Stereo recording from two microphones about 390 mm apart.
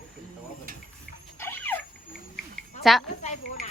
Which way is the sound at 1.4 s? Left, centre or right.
Centre.